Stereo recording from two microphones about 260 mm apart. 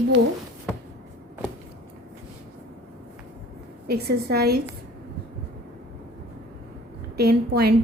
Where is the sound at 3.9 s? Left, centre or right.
Right.